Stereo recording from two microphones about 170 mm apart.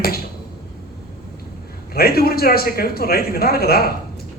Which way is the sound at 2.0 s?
65° left (ahead or behind).